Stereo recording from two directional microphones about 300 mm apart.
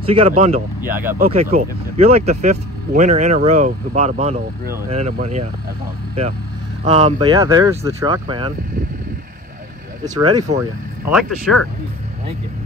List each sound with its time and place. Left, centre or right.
0.1 s speech: centre
0.7 s speech: centre
1.1 s speech: right
6.8 s speech: right
10.1 s speech: centre
11.1 s speech: centre